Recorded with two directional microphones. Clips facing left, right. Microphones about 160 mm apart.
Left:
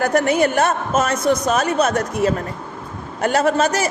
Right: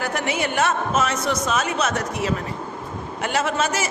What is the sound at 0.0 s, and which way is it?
A man's voice, 45° left (ahead or behind).